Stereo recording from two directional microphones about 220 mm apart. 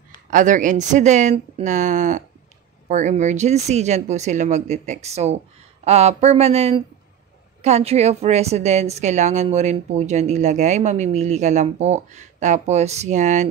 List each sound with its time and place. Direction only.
0.3 s a woman's voice: 35° right (ahead or behind)